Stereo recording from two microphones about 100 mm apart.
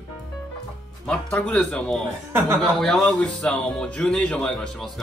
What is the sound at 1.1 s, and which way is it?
Speech, 10° left (ahead or behind).